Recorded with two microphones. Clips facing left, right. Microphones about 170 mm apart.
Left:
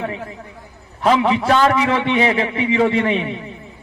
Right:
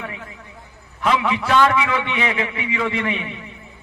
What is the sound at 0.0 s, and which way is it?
A man's voice, 35° left (ahead or behind).